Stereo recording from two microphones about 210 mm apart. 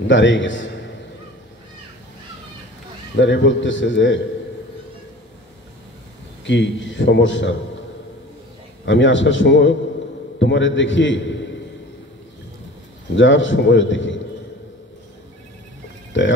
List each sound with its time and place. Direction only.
0.0 s a man's voice: 60° left (ahead or behind)
3.2 s a man's voice: 60° left (ahead or behind)
6.4 s a man's voice: 60° left (ahead or behind)
8.8 s a man's voice: 60° left (ahead or behind)
13.1 s a man's voice: 65° left (ahead or behind)
16.1 s a sound: 60° left (ahead or behind)